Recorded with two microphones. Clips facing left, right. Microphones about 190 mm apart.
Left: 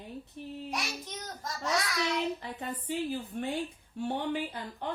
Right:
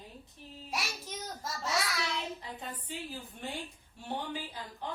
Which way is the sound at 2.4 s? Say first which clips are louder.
Left 5 dB; 65° left (ahead or behind).